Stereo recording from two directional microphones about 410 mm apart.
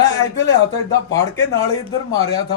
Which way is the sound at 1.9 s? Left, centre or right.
Centre.